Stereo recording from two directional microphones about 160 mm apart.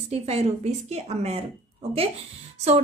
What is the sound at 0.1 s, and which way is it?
A woman's voice, 40° right (ahead or behind).